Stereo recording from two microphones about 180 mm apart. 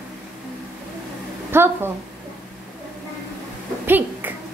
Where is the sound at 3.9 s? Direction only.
10° right (ahead or behind).